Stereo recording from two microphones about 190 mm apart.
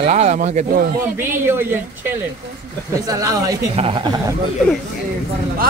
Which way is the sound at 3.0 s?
20° right (ahead or behind).